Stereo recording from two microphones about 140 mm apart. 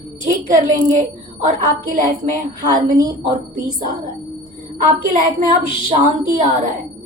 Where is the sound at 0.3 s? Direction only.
65° right (ahead or behind).